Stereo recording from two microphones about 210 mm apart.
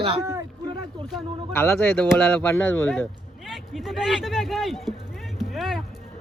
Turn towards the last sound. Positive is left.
turn(degrees=0)  # may be behind; listen again after turning